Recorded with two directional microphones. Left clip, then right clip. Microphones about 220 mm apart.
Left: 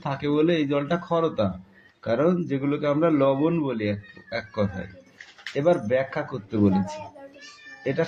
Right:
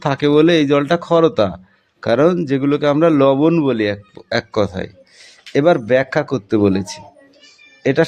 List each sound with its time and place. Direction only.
0.0 s a man's voice: 55° right (ahead or behind)